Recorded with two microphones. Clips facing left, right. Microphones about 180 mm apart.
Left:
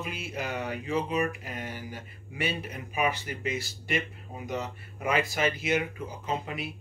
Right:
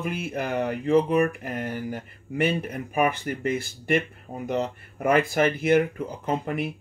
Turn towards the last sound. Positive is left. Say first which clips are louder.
# right 6 dB
turn(degrees=-55)  # may be behind; listen again after turning